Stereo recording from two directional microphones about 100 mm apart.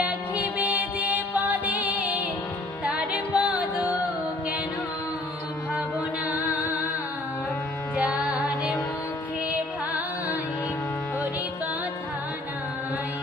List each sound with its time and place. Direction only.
0.0 s music: 15° right (ahead or behind)
6.2 s music: 15° right (ahead or behind)
7.9 s music: 10° right (ahead or behind)